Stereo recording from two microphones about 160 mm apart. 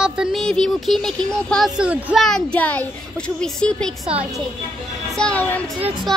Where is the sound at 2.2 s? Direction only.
5° left (ahead or behind).